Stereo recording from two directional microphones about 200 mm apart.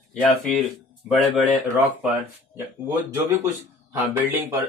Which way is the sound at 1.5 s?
10° right (ahead or behind).